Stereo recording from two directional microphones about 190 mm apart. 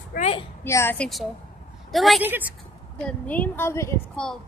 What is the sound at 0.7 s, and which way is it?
A woman's voice, 15° left (ahead or behind).